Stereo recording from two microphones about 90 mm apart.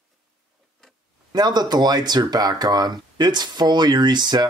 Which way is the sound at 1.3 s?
50° right (ahead or behind).